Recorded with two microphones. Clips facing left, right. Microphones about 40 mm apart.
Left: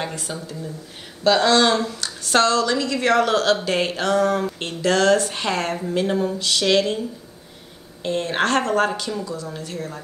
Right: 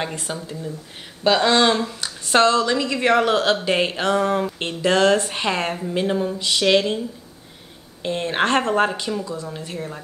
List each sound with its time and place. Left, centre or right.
0.1 s speech: right
5.9 s speech: centre
8.0 s speech: right
9.1 s speech: centre
9.6 s speech: right